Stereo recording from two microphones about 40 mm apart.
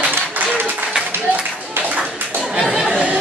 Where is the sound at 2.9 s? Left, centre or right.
Right.